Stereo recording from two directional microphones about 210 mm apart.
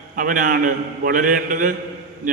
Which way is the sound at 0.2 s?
40° right (ahead or behind).